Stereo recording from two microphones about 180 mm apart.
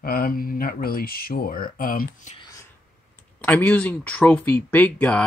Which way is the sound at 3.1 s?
10° left (ahead or behind).